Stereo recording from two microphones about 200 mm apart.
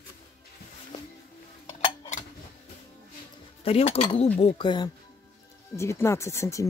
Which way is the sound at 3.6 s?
30° left (ahead or behind).